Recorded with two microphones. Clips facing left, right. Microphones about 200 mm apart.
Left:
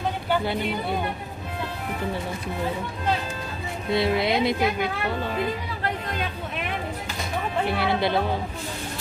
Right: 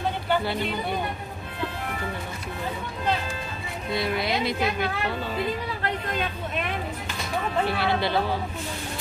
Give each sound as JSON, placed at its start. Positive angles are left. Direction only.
{"t": 3.9, "sound": "speech", "side_deg": 25}
{"t": 7.6, "sound": "speech", "side_deg": 20}